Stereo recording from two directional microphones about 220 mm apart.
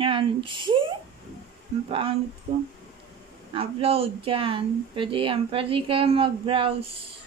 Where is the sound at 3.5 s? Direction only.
25° right (ahead or behind).